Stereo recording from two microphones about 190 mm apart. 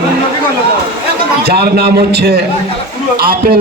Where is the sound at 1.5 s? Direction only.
55° right (ahead or behind).